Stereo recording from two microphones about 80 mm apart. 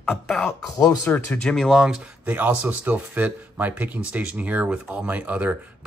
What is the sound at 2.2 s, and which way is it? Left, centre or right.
Speech, right.